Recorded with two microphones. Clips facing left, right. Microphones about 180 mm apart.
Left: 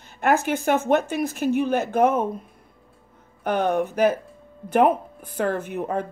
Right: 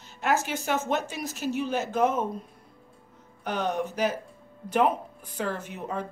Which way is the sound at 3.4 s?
55° left (ahead or behind).